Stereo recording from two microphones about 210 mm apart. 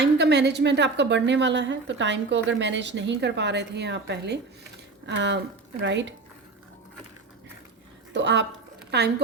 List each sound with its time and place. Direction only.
0.0 s a woman's voice: 55° right (ahead or behind)
8.1 s a woman's voice: 55° right (ahead or behind)